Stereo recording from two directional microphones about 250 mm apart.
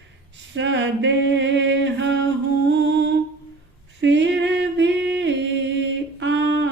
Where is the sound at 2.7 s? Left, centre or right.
Right.